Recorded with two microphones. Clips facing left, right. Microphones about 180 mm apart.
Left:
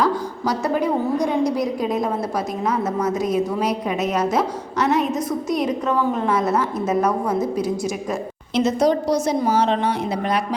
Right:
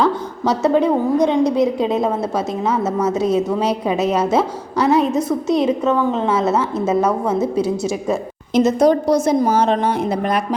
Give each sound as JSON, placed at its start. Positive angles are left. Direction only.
{"t": 0.0, "sound": "a woman's voice", "side_deg": -25}
{"t": 8.5, "sound": "a woman's voice", "side_deg": -50}